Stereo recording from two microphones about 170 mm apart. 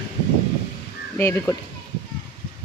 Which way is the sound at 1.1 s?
15° left (ahead or behind).